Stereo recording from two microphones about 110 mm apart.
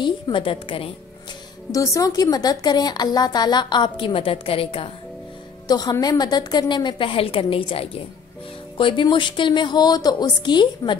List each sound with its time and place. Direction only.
0.0 s a woman's voice: 50° left (ahead or behind)
1.7 s a woman's voice: 30° left (ahead or behind); by 4.9 s 55° left (ahead or behind)
5.7 s a woman's voice: 35° left (ahead or behind)